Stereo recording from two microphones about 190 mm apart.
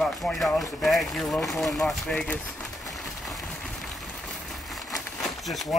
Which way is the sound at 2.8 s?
Centre (ahead or behind).